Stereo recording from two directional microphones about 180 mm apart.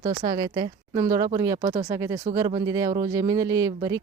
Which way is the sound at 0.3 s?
20° right (ahead or behind).